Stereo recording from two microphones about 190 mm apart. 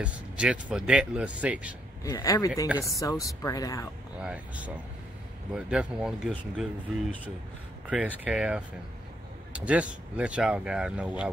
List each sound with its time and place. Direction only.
0.0 s speech: 5° right (ahead or behind)
2.0 s speech: 20° left (ahead or behind)
4.2 s speech: 5° right (ahead or behind)